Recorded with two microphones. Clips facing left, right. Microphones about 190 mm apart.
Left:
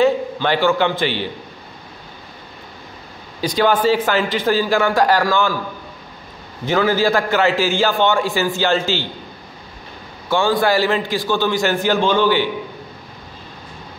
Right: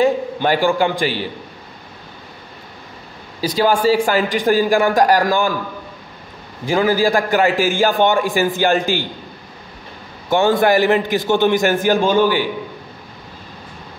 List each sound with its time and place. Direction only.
0.0 s a man's voice: 10° right (ahead or behind)
3.6 s a man's voice: 10° right (ahead or behind)
6.6 s a man's voice: 10° right (ahead or behind)
10.3 s a man's voice: 20° right (ahead or behind)